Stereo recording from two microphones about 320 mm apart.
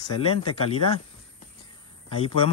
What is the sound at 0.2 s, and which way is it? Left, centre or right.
Speech, centre.